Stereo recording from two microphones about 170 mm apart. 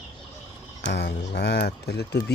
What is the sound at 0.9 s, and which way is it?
Speech, 75° left (ahead or behind).